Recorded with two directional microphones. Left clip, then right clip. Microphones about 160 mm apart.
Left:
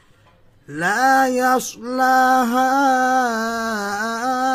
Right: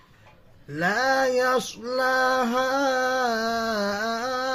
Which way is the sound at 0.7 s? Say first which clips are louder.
Left 6 dB; 35° left (ahead or behind).